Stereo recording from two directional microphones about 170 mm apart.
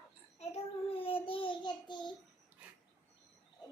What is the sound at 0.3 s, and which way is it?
Child singing, 35° left (ahead or behind).